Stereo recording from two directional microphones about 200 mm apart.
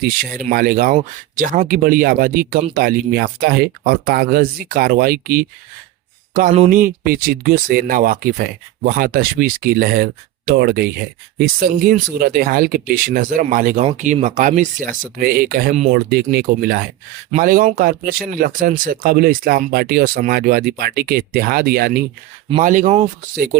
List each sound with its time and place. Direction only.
0.3 s speech: 45° right (ahead or behind)
6.7 s speech: 45° right (ahead or behind)